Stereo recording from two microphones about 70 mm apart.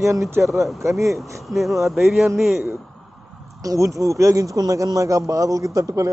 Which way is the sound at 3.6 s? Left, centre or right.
Right.